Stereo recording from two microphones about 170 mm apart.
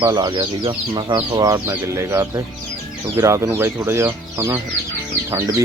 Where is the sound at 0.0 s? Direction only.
25° right (ahead or behind).